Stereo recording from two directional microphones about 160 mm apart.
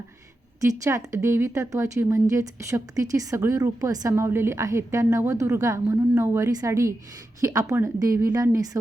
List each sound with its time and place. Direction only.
0.6 s a woman's voice: 20° right (ahead or behind)